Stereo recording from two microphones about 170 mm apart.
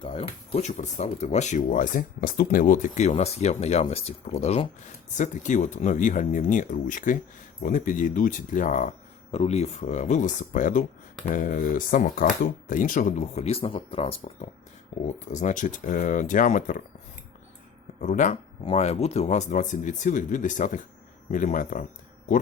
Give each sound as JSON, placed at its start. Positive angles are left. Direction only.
{"t": 0.0, "sound": "speech", "side_deg": 30}
{"t": 18.0, "sound": "speech", "side_deg": 45}